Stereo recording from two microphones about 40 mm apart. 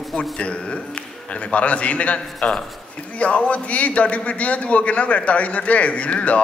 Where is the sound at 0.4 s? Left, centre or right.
Left.